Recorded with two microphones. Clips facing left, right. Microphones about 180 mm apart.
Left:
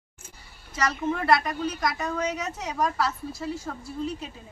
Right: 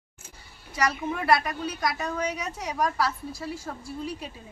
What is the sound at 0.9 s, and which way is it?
A woman's voice, 10° right (ahead or behind).